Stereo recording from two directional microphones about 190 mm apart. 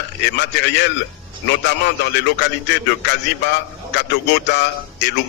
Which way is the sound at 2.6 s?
60° left (ahead or behind).